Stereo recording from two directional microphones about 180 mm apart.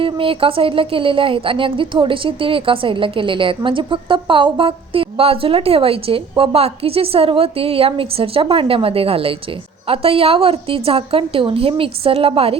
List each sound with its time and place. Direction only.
0.0 s a woman's voice: 30° right (ahead or behind)